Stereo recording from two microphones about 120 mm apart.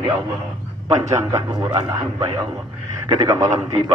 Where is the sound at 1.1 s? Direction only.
25° right (ahead or behind).